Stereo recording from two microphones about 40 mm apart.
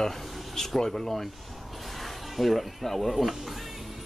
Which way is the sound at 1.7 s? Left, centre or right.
Centre.